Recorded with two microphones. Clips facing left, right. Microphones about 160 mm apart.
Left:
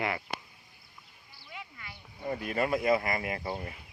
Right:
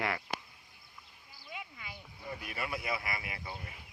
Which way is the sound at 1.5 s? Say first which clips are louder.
Even; 15° right (ahead or behind).